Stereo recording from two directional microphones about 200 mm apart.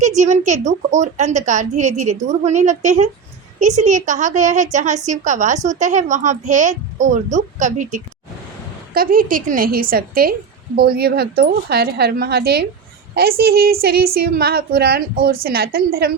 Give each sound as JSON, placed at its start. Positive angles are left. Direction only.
{"t": 0.2, "sound": "a woman's voice", "side_deg": -35}